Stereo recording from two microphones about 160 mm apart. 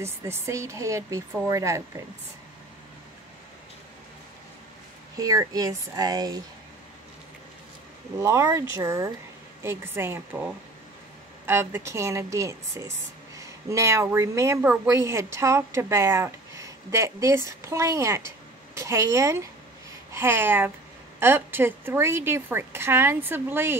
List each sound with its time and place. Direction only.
0.0 s speech: 15° right (ahead or behind)
5.1 s speech: 20° right (ahead or behind)
8.2 s a woman's voice: 20° right (ahead or behind)